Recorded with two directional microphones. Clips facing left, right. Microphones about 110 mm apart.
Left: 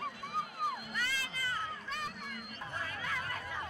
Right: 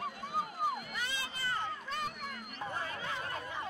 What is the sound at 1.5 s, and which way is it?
Crowd, 40° right (ahead or behind).